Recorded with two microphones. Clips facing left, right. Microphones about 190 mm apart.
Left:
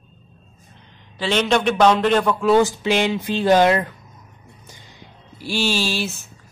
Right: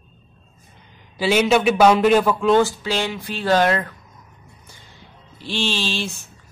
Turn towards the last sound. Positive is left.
turn(degrees=10)  # may be behind; listen again after turning